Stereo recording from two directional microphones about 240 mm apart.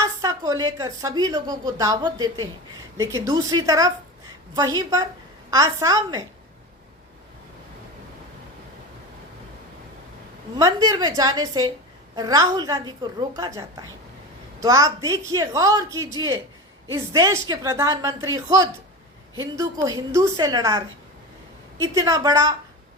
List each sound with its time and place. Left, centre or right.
0.2 s a woman's voice: centre
10.6 s a woman's voice: centre